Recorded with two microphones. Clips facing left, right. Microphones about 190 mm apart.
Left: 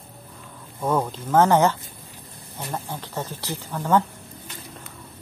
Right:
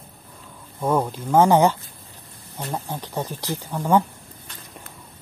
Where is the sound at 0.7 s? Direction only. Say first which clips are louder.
Right 2 dB; 10° right (ahead or behind).